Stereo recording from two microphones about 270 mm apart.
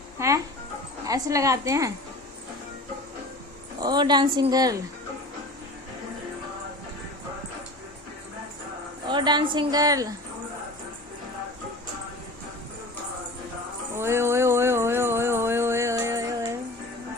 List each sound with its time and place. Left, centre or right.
0.2 s a woman's voice: centre
3.8 s a woman's voice: centre
9.0 s a woman's voice: centre
13.9 s a sound: centre